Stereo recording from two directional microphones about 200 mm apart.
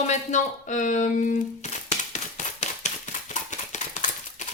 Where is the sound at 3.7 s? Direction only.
40° left (ahead or behind).